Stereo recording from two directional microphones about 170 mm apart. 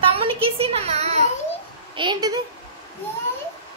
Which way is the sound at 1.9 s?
25° right (ahead or behind).